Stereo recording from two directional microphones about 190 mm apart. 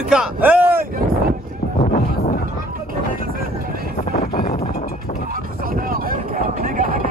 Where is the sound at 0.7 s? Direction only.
50° right (ahead or behind).